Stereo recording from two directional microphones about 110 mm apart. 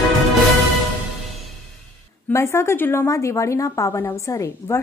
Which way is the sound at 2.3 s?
25° left (ahead or behind).